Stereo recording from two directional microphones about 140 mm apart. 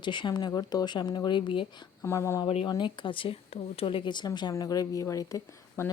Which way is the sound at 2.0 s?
20° left (ahead or behind).